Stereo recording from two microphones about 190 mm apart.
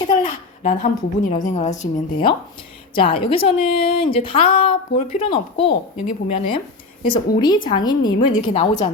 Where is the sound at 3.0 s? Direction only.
25° left (ahead or behind).